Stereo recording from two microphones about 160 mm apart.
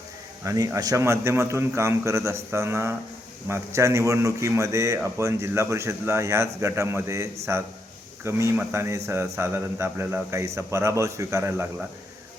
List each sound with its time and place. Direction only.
0.4 s a man's voice: 20° right (ahead or behind)